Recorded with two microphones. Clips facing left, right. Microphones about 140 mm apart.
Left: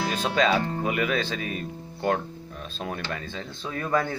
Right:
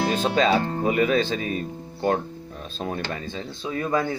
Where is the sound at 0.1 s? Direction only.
25° right (ahead or behind).